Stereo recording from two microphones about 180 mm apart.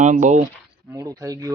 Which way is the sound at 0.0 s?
45° right (ahead or behind).